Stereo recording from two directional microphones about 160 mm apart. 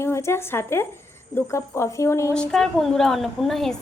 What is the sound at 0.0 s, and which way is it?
Speech, 15° left (ahead or behind).